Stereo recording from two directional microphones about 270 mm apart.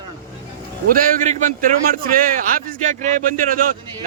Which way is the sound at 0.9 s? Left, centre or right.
Right.